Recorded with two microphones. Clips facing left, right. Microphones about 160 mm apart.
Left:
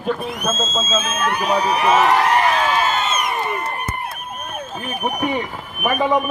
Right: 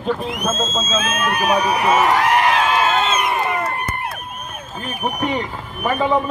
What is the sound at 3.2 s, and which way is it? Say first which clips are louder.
Crowd: right 3 dB; 90° right.